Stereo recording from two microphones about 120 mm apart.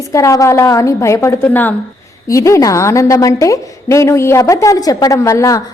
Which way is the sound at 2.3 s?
25° left (ahead or behind).